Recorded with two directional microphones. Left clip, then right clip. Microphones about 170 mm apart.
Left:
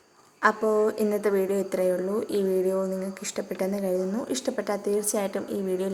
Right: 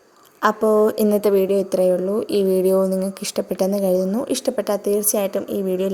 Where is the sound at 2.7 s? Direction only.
45° right (ahead or behind).